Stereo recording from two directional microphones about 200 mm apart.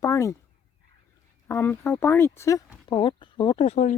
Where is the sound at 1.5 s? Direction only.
10° left (ahead or behind); by 4.0 s 35° left (ahead or behind).